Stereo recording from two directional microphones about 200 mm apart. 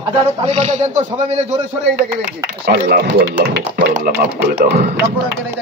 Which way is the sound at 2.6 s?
50° right (ahead or behind).